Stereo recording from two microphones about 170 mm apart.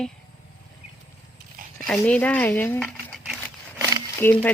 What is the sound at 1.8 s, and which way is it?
Speech, 5° left (ahead or behind).